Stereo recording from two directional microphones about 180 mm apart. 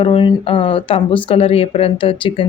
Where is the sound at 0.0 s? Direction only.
30° left (ahead or behind).